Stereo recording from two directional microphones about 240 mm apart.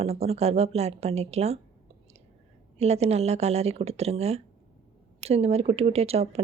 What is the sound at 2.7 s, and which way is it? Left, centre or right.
Speech, right.